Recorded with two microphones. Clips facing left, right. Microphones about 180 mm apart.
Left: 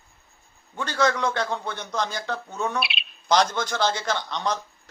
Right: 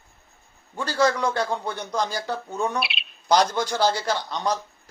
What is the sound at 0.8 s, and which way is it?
Speech, 35° right (ahead or behind).